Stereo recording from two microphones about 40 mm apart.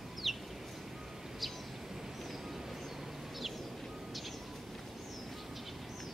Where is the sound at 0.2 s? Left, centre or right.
Centre.